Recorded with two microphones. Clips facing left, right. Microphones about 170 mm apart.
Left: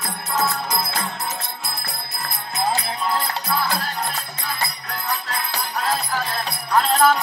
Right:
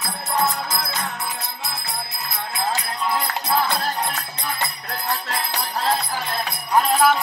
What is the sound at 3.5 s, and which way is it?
Music, 25° right (ahead or behind).